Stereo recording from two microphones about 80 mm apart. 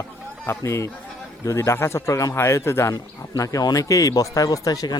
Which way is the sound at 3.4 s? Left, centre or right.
Left.